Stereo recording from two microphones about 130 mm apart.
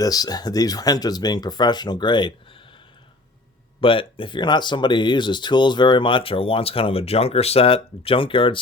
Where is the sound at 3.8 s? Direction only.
45° left (ahead or behind).